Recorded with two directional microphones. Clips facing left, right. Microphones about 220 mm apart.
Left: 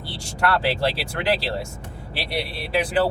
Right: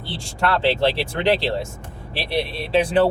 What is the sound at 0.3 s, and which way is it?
Speech, 25° right (ahead or behind).